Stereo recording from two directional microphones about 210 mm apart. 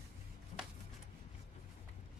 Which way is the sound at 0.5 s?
35° left (ahead or behind).